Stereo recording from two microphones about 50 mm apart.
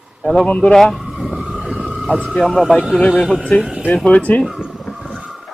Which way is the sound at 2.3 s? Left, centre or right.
Centre.